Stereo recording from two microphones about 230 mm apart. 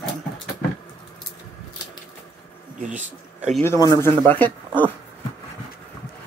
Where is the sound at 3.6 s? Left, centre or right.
Centre.